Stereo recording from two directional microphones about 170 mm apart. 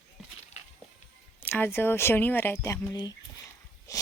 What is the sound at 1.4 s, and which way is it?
Speech, 10° left (ahead or behind).